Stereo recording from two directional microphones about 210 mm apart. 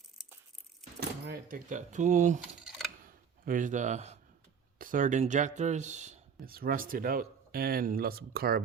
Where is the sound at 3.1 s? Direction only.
40° right (ahead or behind).